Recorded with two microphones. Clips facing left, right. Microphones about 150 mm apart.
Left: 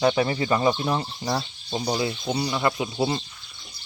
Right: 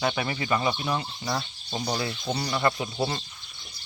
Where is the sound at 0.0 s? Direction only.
30° left (ahead or behind).